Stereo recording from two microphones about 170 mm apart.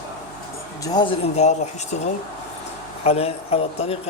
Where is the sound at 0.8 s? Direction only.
20° left (ahead or behind).